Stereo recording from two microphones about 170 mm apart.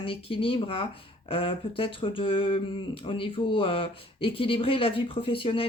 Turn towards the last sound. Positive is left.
turn(degrees=30)  # may be behind; listen again after turning